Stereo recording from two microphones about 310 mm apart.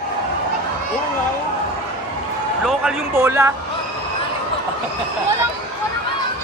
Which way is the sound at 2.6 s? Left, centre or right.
Centre.